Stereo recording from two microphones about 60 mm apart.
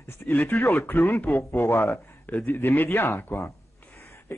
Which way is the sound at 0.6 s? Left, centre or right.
Left.